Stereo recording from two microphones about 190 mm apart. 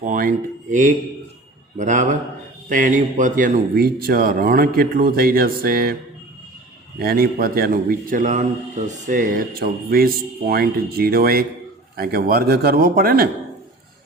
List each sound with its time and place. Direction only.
0.0 s a man's voice: 45° right (ahead or behind)
7.0 s a man's voice: 50° right (ahead or behind)